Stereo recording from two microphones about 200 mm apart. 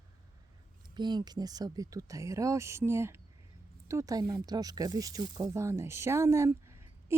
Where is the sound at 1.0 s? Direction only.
20° right (ahead or behind).